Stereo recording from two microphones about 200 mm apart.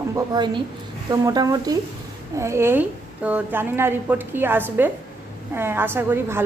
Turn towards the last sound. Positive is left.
turn(degrees=-10)  # may be behind; listen again after turning